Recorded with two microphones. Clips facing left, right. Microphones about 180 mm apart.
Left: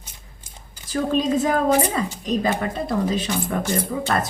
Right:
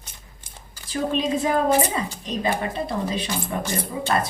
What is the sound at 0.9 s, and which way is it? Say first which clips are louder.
A woman's voice: left 3 dB; 45° left (ahead or behind).